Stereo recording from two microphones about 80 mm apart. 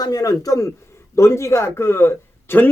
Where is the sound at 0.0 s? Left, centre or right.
Left.